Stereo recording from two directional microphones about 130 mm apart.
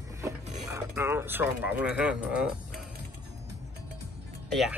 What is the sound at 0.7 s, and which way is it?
Speech, 20° right (ahead or behind).